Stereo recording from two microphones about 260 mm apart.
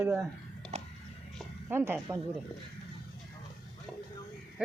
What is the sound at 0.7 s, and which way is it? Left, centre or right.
Music, right.